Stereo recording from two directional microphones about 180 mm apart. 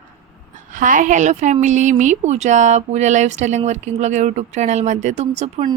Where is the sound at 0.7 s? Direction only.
45° right (ahead or behind).